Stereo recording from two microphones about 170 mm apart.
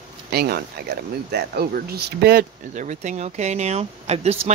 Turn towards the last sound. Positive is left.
turn(degrees=-40)  # may be behind; listen again after turning